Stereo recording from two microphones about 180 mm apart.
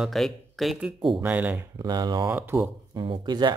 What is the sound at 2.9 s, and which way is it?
Speech, 25° right (ahead or behind).